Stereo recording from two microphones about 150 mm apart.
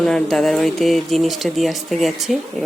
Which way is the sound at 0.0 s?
5° left (ahead or behind).